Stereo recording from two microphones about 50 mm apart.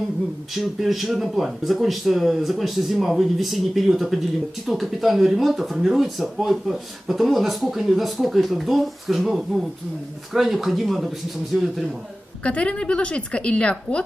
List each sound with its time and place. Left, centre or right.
0.6 s speech: centre
12.4 s a woman's voice: left